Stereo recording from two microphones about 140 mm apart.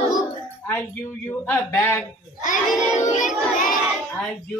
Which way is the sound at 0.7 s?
15° left (ahead or behind).